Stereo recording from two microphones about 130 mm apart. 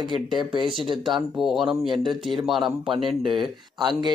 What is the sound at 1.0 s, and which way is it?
Speech, 5° right (ahead or behind).